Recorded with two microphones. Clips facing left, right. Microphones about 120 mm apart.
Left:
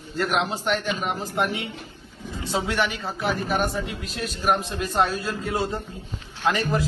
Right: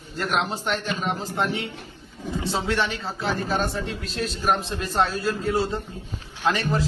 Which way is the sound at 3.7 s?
5° left (ahead or behind).